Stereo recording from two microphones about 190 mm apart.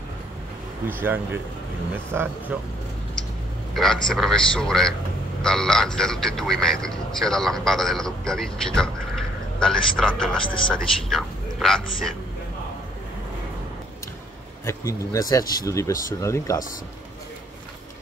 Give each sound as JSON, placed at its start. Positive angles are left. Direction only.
{"t": 0.8, "sound": "speech", "side_deg": -10}
{"t": 3.7, "sound": "speech", "side_deg": 0}
{"t": 14.7, "sound": "speech", "side_deg": 15}